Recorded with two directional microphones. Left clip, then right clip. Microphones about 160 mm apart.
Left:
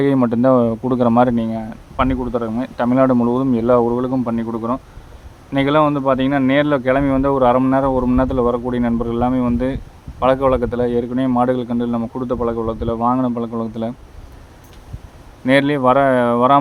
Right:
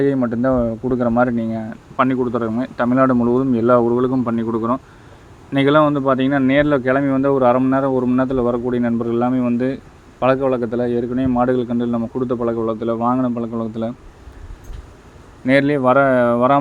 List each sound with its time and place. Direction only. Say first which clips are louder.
0.0 s speech: left 2 dB; 15° left (ahead or behind)
1.5 s speech: even; centre (ahead or behind)
15.4 s speech: left 1 dB; 5° left (ahead or behind)